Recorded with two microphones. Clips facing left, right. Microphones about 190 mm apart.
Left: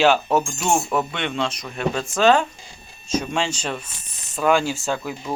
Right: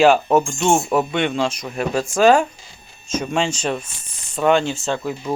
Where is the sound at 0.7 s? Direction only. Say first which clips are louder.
Right 3 dB; 30° right (ahead or behind).